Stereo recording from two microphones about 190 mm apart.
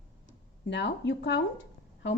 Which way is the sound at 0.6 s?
65° left (ahead or behind).